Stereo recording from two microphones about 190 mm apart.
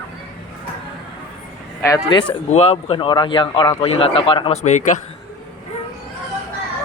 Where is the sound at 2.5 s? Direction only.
35° left (ahead or behind).